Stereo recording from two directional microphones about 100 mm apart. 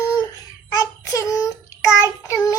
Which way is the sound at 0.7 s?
30° left (ahead or behind).